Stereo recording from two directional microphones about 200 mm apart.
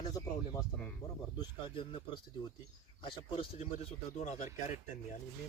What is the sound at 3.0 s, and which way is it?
Speech, 30° left (ahead or behind).